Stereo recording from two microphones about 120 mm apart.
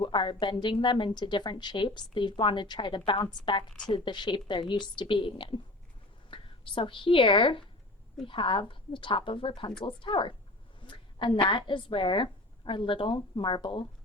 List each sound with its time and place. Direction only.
0.0 s a woman's voice: 45° left (ahead or behind)